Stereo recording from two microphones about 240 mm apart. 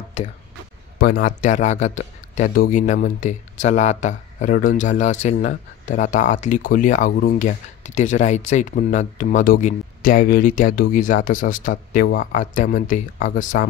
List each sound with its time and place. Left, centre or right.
0.9 s speech: left